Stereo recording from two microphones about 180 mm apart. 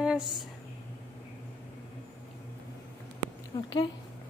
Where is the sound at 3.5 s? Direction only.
25° left (ahead or behind).